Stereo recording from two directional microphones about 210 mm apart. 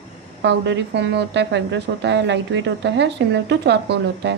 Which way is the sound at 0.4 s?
55° right (ahead or behind).